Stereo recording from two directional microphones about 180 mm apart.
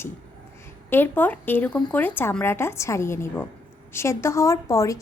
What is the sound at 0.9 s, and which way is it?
A woman's voice, 10° left (ahead or behind).